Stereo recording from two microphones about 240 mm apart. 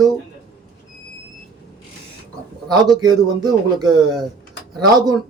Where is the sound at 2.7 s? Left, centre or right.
Centre.